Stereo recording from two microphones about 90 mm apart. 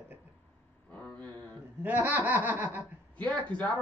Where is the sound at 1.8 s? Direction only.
20° right (ahead or behind).